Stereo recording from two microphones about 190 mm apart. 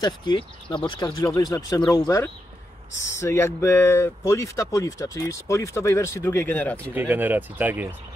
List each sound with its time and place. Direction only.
0.0 s speech: 25° left (ahead or behind); by 6.8 s 10° left (ahead or behind)
6.9 s speech: 10° right (ahead or behind)